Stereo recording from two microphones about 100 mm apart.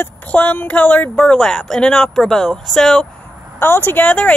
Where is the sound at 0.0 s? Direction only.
20° left (ahead or behind).